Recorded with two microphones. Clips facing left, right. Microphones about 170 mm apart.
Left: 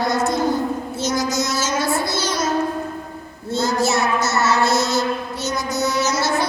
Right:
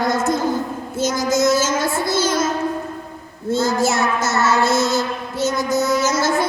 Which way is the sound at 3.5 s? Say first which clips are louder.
Right 2 dB; 50° right (ahead or behind).